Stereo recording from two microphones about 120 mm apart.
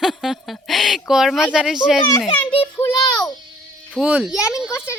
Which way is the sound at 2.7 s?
30° left (ahead or behind).